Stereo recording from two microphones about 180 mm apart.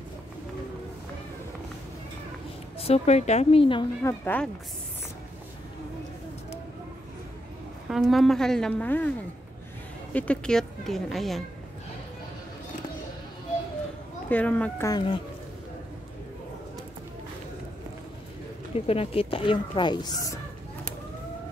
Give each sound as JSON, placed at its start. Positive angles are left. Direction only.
{"t": 2.8, "sound": "a woman's voice", "side_deg": 35}
{"t": 4.0, "sound": "speech", "side_deg": 10}
{"t": 7.9, "sound": "speech", "side_deg": 0}
{"t": 10.1, "sound": "speech", "side_deg": 5}
{"t": 14.3, "sound": "speech", "side_deg": 10}
{"t": 14.9, "sound": "a woman's voice", "side_deg": 25}
{"t": 18.9, "sound": "a woman's voice", "side_deg": 30}